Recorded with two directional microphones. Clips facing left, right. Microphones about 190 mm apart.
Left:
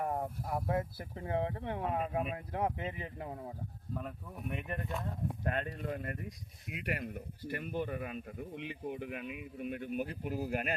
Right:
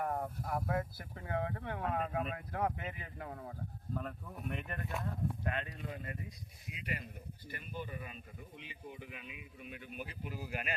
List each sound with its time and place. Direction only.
0.0 s speech: 20° left (ahead or behind)
3.9 s speech: 5° left (ahead or behind)
5.4 s speech: 40° left (ahead or behind)